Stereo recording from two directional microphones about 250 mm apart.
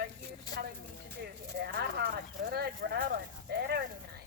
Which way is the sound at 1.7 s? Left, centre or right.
Right.